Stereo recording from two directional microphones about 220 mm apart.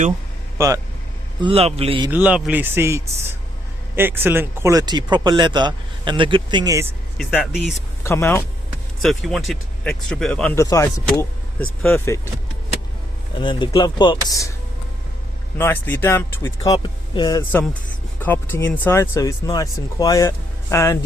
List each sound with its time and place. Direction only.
0.6 s speech: 10° right (ahead or behind)
1.4 s speech: 25° right (ahead or behind)
2.0 s speech: 5° right (ahead or behind)
7.2 s speech: centre (ahead or behind)
8.0 s speech: 10° left (ahead or behind)
9.0 s speech: centre (ahead or behind)
13.4 s speech: 20° left (ahead or behind)
15.5 s speech: 10° left (ahead or behind)